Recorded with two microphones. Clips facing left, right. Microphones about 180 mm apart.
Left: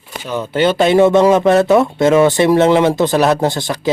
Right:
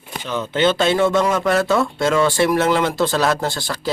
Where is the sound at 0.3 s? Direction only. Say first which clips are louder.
Left 3 dB; 10° left (ahead or behind).